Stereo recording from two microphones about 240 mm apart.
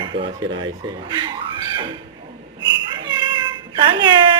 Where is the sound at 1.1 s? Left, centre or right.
Centre.